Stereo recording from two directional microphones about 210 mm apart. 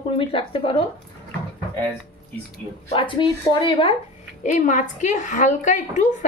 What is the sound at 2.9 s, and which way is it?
A woman's voice, 25° left (ahead or behind).